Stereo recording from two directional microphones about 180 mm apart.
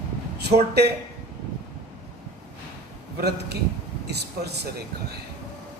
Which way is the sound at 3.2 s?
65° right (ahead or behind).